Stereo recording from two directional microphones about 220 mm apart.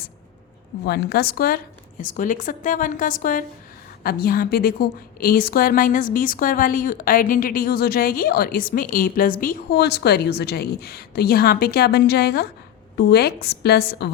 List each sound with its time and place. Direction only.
0.9 s a woman's voice: 45° left (ahead or behind)